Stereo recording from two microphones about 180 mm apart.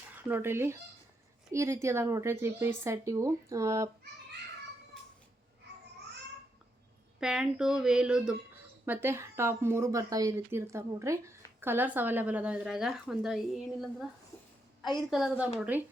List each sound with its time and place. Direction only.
0.3 s speech: 10° right (ahead or behind)
7.2 s a woman's voice: 5° right (ahead or behind)
15.1 s a woman's voice: centre (ahead or behind)